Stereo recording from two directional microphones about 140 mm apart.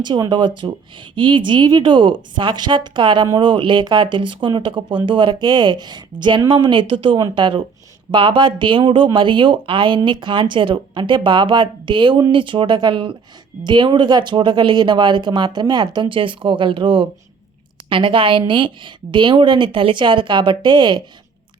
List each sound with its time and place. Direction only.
0.0 s speech: 30° right (ahead or behind)